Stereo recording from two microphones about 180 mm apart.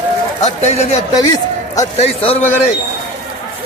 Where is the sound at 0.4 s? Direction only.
40° left (ahead or behind).